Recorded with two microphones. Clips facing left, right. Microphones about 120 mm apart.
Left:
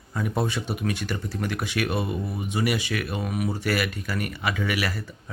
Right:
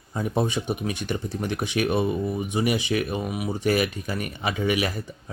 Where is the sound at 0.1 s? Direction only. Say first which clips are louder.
Right 2 dB; 25° right (ahead or behind).